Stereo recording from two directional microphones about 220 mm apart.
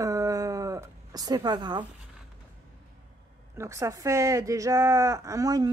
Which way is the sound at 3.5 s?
15° right (ahead or behind).